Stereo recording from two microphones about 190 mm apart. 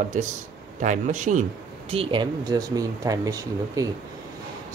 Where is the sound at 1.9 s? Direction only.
30° right (ahead or behind).